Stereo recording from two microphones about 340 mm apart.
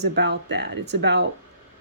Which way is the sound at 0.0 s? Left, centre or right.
Right.